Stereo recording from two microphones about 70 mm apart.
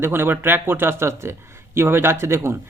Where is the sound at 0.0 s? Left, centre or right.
Right.